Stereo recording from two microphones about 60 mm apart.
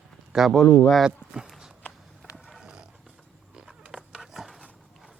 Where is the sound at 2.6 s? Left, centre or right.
Centre.